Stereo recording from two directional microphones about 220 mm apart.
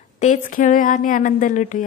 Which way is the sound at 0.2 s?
35° left (ahead or behind).